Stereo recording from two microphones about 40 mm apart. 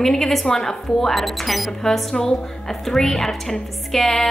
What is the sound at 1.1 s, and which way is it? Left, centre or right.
Speech, centre.